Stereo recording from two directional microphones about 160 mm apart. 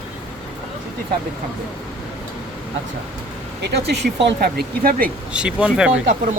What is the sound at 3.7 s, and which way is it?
Speech, 90° right.